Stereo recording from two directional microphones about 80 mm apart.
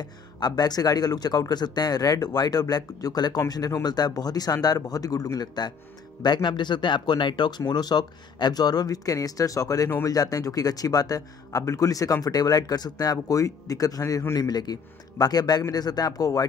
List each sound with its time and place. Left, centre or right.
0.0 s speech: left
6.2 s speech: left